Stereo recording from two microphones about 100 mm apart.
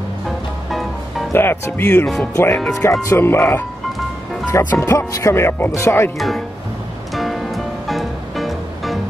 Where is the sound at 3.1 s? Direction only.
25° left (ahead or behind).